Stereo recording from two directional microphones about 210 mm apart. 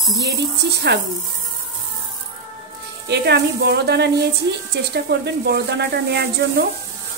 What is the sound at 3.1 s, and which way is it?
Speech, 50° right (ahead or behind).